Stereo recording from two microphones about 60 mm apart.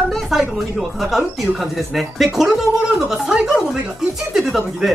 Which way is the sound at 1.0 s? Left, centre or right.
Centre.